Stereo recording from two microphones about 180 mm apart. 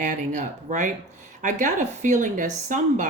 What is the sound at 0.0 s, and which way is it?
Speech, 40° right (ahead or behind).